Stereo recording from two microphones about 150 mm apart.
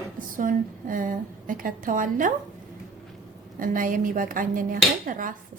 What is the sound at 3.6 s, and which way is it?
A woman's voice, 65° right (ahead or behind).